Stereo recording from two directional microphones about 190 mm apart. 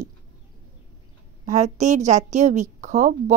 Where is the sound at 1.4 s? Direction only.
40° right (ahead or behind).